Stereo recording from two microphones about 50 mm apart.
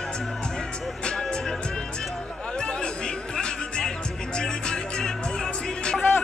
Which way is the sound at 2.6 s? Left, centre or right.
Centre.